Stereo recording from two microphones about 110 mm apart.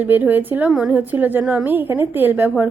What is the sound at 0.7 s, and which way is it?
A woman's voice, 5° right (ahead or behind).